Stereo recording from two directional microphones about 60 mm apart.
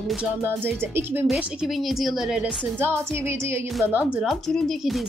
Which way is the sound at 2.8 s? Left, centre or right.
Right.